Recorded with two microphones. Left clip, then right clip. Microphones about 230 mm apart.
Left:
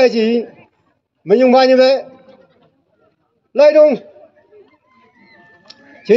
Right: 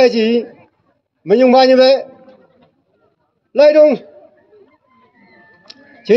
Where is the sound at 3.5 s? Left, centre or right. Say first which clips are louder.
Even; right.